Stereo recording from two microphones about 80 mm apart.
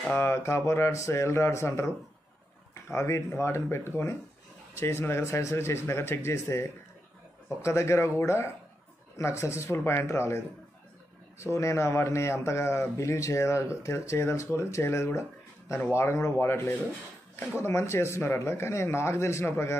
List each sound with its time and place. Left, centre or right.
0.1 s a man's voice: left